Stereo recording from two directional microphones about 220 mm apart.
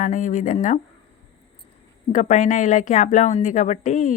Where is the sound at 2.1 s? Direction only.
35° left (ahead or behind).